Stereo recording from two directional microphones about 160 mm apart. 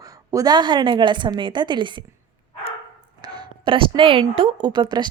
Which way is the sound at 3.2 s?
25° right (ahead or behind).